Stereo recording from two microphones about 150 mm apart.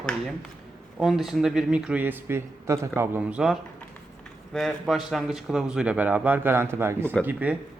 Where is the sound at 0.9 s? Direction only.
5° right (ahead or behind).